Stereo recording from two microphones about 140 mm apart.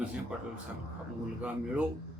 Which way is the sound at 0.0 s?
5° right (ahead or behind).